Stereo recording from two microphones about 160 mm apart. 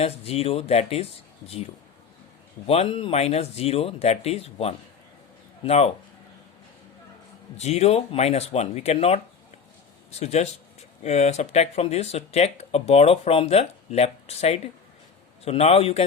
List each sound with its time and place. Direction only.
0.0 s speech: 40° left (ahead or behind)
2.6 s speech: 35° left (ahead or behind)
7.5 s speech: 40° left (ahead or behind)